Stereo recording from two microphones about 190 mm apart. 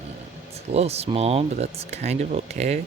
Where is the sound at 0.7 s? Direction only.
35° right (ahead or behind).